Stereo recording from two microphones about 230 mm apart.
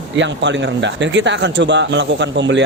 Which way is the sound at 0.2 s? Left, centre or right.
Right.